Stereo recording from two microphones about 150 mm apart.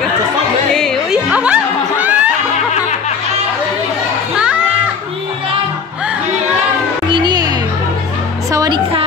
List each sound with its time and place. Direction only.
0.7 s music: 5° left (ahead or behind)
1.3 s music: 10° right (ahead or behind)
7.1 s music: 30° right (ahead or behind)